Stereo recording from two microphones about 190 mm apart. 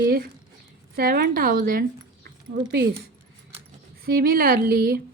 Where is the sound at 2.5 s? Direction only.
60° right (ahead or behind).